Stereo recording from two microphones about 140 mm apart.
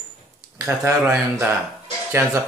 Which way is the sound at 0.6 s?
15° right (ahead or behind).